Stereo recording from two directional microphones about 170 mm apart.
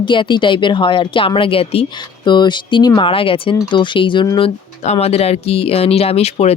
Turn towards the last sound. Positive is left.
turn(degrees=40)  # may be behind; listen again after turning